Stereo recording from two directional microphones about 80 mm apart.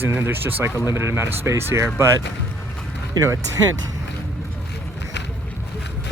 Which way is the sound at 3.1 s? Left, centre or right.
Right.